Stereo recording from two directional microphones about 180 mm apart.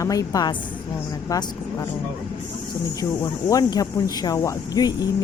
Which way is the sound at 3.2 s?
20° left (ahead or behind).